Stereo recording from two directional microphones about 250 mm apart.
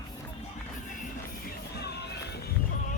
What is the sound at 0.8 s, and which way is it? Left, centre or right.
Music, left.